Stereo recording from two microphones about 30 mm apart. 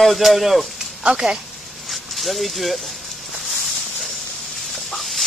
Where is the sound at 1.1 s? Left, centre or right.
Right.